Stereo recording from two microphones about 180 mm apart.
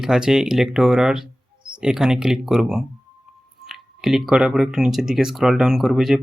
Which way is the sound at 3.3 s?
Centre (ahead or behind).